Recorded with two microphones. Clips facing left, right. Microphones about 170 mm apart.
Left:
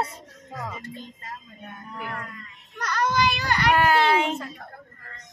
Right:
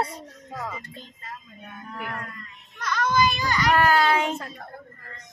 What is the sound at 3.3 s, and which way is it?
Speech, 65° left (ahead or behind).